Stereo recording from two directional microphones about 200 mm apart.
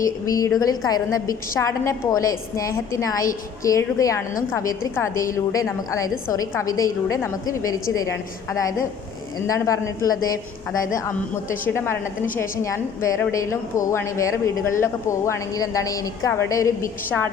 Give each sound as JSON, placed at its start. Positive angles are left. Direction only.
{"t": 0.0, "sound": "a woman's voice", "side_deg": 15}
{"t": 11.7, "sound": "a woman's voice", "side_deg": 10}